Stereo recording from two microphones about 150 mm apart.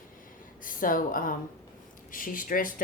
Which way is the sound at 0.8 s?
65° left (ahead or behind).